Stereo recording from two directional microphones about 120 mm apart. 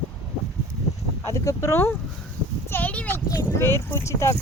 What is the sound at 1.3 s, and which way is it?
Speech, 25° left (ahead or behind).